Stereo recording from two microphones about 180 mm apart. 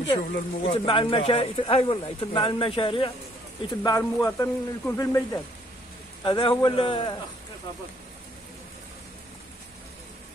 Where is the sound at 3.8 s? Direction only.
20° left (ahead or behind).